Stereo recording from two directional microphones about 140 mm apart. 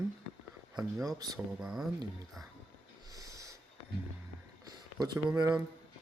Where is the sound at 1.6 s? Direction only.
5° right (ahead or behind).